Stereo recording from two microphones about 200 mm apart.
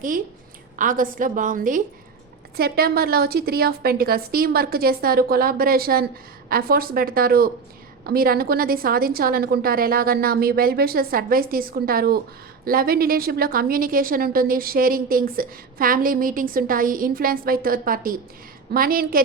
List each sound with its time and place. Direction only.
0.8 s a woman's voice: 40° right (ahead or behind)